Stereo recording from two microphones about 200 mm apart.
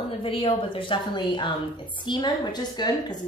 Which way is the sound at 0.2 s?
25° left (ahead or behind).